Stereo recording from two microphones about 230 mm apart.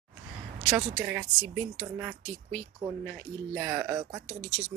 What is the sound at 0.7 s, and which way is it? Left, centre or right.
Speech, centre.